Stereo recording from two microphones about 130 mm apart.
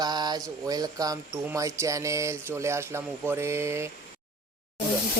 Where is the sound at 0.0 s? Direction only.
35° right (ahead or behind).